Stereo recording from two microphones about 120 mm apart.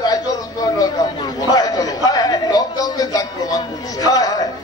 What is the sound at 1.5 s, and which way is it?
Chatter, 35° left (ahead or behind).